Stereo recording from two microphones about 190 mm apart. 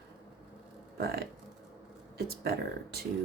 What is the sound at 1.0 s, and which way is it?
Speech, 55° right (ahead or behind).